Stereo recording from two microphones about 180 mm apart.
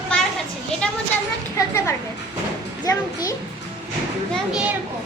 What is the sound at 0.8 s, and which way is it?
Speech, 5° left (ahead or behind).